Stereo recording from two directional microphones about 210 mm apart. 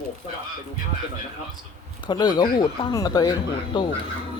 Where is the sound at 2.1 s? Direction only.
20° left (ahead or behind).